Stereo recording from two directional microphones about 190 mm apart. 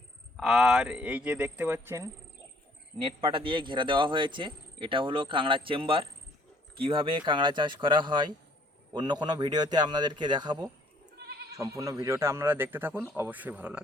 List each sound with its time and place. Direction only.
0.3 s speech: centre (ahead or behind)
3.0 s speech: 25° right (ahead or behind)
11.2 s goat: 55° right (ahead or behind)
11.5 s speech: 15° right (ahead or behind)